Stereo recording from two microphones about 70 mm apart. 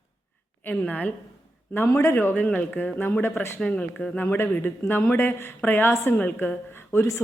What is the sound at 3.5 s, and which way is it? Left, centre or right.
Speech, centre.